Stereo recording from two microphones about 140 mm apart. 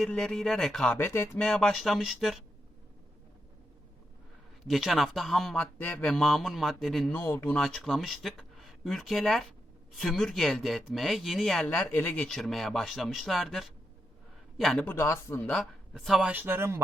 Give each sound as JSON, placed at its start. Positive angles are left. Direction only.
{"t": 0.0, "sound": "speech", "side_deg": 5}
{"t": 0.9, "sound": "speech", "side_deg": 15}
{"t": 1.5, "sound": "speech", "side_deg": 5}
{"t": 4.7, "sound": "speech", "side_deg": 0}
{"t": 7.1, "sound": "speech", "side_deg": 15}
{"t": 7.5, "sound": "speech", "side_deg": 5}
{"t": 14.8, "sound": "speech", "side_deg": 20}
{"t": 16.0, "sound": "speech", "side_deg": 0}
{"t": 16.3, "sound": "speech", "side_deg": -15}